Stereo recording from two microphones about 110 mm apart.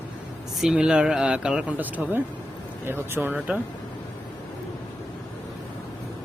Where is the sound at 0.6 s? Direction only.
5° right (ahead or behind).